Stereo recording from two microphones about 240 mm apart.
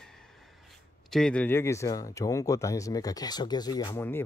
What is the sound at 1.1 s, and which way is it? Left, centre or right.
Speech, centre.